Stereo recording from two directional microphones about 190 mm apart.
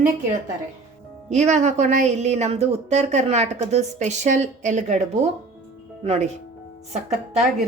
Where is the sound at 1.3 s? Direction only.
35° right (ahead or behind).